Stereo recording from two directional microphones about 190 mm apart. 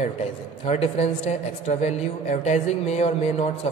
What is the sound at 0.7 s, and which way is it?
A woman's voice, 35° left (ahead or behind).